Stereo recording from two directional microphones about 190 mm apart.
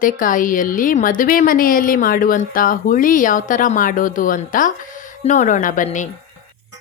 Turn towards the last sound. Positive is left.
turn(degrees=40)  # may be behind; listen again after turning